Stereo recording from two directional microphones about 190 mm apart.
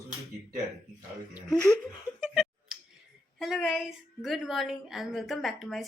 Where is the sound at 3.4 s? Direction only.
Centre (ahead or behind).